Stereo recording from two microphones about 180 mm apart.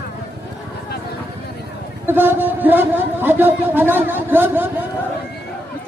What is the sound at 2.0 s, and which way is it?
Speech, 10° right (ahead or behind).